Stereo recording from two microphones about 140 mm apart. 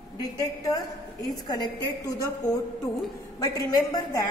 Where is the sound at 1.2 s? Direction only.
30° left (ahead or behind).